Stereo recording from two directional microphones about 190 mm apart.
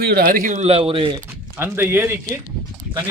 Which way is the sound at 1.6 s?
10° right (ahead or behind).